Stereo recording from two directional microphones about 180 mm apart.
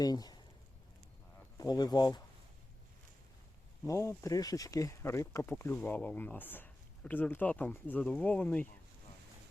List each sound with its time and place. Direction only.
0.0 s speech: 20° left (ahead or behind)
1.5 s speech: 20° left (ahead or behind)
3.8 s speech: 15° left (ahead or behind)